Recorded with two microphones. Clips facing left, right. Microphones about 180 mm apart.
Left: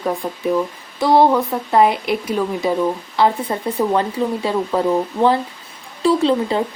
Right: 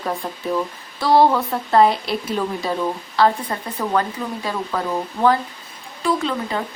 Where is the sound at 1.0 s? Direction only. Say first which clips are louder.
Left 2 dB; 20° left (ahead or behind).